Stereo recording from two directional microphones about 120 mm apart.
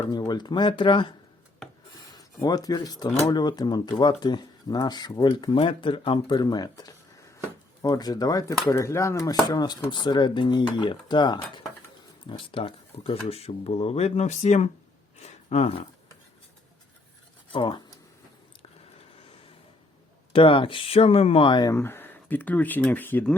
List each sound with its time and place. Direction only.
0.1 s speech: 35° left (ahead or behind)
2.0 s speech: 35° left (ahead or behind); by 14.7 s 75° left (ahead or behind)
15.2 s speech: 60° left (ahead or behind)
17.5 s speech: 45° left (ahead or behind)
20.3 s speech: 45° left (ahead or behind)
21.7 s speech: 20° left (ahead or behind)